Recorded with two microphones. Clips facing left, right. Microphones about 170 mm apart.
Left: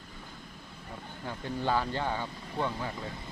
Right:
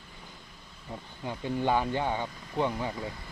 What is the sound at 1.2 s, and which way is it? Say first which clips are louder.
Speech: right 4 dB; 15° right (ahead or behind).